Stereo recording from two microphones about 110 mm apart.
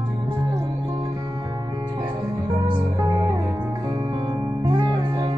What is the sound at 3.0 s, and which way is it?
Music, 35° right (ahead or behind).